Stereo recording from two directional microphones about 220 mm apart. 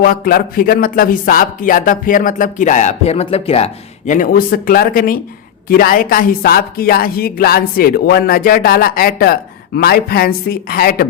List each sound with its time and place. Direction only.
0.0 s a woman's voice: 40° left (ahead or behind)